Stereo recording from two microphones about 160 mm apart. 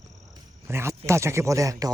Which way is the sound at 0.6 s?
15° right (ahead or behind).